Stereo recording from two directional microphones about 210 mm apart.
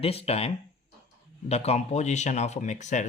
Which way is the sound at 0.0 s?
30° left (ahead or behind).